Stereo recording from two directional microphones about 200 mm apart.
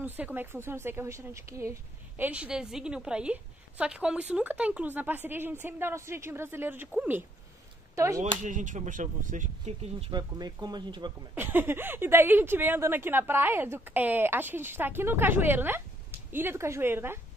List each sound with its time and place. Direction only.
0.0 s a woman's voice: 10° right (ahead or behind)
8.4 s speech: 40° right (ahead or behind); by 11.1 s 20° right (ahead or behind)
11.3 s a woman's voice: 10° right (ahead or behind)